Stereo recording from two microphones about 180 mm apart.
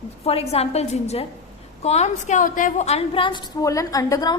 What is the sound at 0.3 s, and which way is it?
A woman's voice, 35° left (ahead or behind).